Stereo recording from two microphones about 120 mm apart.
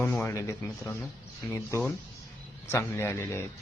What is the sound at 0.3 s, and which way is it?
Speech, 25° left (ahead or behind).